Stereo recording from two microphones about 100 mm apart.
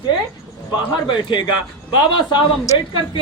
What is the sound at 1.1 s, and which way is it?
A woman's voice, 50° left (ahead or behind).